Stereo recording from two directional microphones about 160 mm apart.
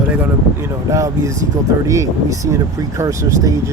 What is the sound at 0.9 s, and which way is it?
Speech, 20° right (ahead or behind).